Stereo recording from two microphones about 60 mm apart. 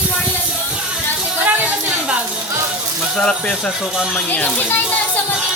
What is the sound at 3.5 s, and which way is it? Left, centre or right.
Speech, centre.